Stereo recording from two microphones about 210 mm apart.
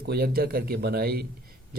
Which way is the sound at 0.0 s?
50° right (ahead or behind).